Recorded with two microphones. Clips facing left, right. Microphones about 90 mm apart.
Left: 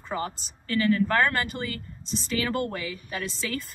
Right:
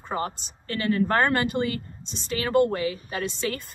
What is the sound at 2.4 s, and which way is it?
Speech, 40° right (ahead or behind).